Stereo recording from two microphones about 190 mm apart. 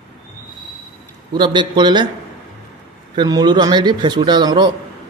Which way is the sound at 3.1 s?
20° right (ahead or behind).